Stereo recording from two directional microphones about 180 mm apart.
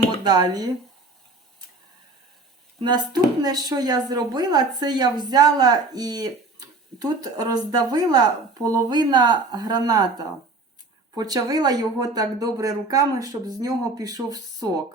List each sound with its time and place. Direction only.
0.3 s speech: 20° right (ahead or behind)
2.9 s speech: 20° right (ahead or behind)